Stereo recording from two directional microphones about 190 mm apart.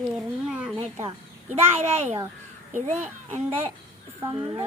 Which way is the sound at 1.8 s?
35° right (ahead or behind).